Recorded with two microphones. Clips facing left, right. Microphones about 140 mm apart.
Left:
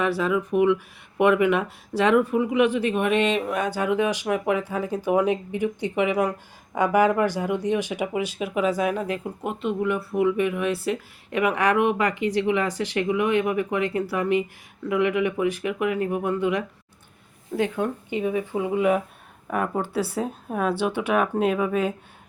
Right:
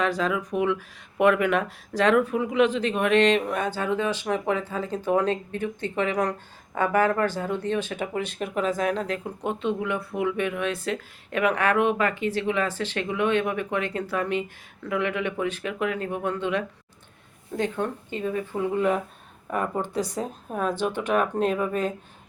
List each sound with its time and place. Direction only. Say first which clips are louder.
0.0 s speech: left 2 dB; 10° left (ahead or behind)